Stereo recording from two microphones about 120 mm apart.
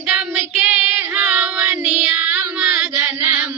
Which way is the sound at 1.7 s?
10° right (ahead or behind).